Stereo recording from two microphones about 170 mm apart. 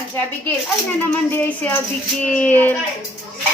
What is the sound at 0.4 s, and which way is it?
A child's voice, 10° left (ahead or behind).